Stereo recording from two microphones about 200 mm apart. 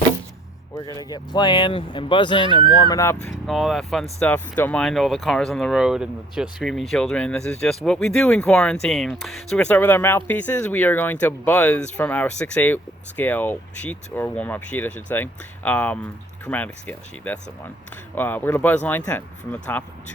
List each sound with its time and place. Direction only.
0.9 s speech: 20° left (ahead or behind)